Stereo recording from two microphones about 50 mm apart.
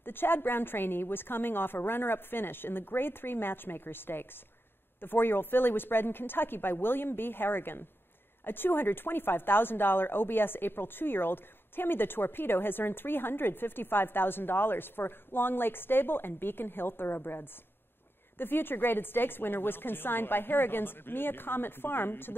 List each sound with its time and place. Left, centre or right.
0.0 s speech: left